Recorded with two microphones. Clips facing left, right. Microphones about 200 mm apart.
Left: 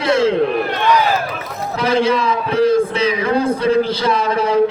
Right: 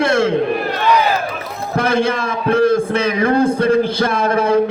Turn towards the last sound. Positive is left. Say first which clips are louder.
# right 1 dB
turn(degrees=-50)  # may be behind; listen again after turning